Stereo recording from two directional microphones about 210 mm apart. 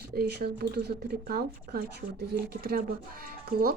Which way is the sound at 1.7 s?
50° right (ahead or behind).